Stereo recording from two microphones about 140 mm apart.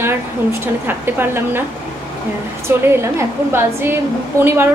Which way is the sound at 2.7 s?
20° right (ahead or behind).